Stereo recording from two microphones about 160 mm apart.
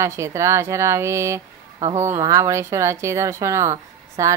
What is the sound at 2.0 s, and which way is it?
Speech, 15° right (ahead or behind).